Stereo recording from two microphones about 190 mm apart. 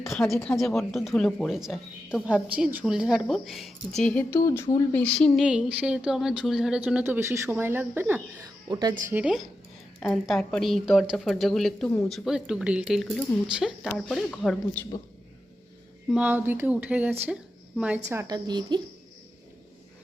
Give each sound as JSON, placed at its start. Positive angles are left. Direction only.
{"t": 0.0, "sound": "a woman's voice", "side_deg": 0}
{"t": 9.1, "sound": "a woman's voice", "side_deg": -5}
{"t": 16.0, "sound": "a woman's voice", "side_deg": -5}